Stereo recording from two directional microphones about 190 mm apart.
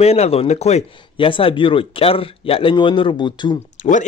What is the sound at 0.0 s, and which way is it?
Speech, 35° left (ahead or behind).